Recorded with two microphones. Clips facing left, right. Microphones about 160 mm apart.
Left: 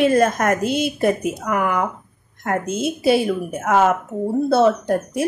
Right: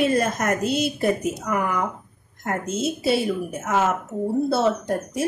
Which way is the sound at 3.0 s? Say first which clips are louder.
Left 6 dB; centre (ahead or behind).